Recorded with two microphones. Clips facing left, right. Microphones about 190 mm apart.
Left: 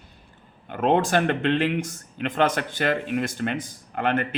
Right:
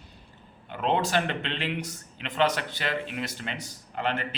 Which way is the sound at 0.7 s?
50° left (ahead or behind).